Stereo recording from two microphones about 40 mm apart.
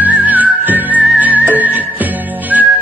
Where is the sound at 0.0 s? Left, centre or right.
Right.